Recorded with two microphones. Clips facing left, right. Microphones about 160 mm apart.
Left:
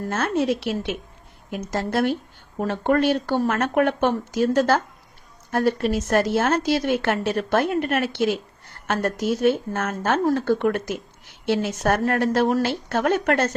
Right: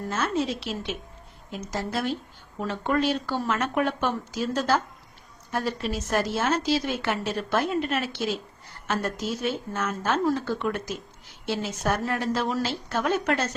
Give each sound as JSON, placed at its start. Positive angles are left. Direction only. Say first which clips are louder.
{"t": 0.1, "sound": "speech", "louder": "left 5 dB", "side_deg": 60}